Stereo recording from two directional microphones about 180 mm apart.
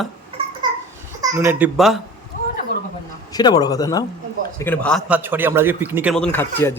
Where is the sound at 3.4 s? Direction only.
20° left (ahead or behind).